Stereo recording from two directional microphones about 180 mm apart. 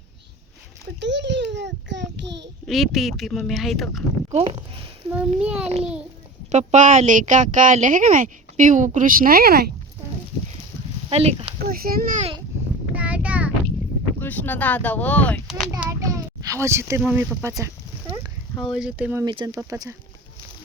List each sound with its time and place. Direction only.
0.9 s a sound: 80° right
2.6 s speech: centre (ahead or behind)
4.3 s speech: 30° right (ahead or behind)
5.4 s speech: 5° right (ahead or behind)
6.5 s speech: 40° right (ahead or behind); by 9.6 s 60° right (ahead or behind)
11.1 s speech: 35° right (ahead or behind)
11.6 s a child's voice: 55° right (ahead or behind)
12.9 s child singing: 10° right (ahead or behind)
14.2 s speech: 10° left (ahead or behind)
15.8 s a child's voice: 15° right (ahead or behind)
17.0 s speech: 5° right (ahead or behind)
18.7 s speech: 5° right (ahead or behind)
19.2 s speech: 25° right (ahead or behind)